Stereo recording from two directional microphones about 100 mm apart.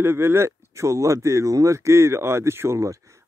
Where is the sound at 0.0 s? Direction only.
25° right (ahead or behind).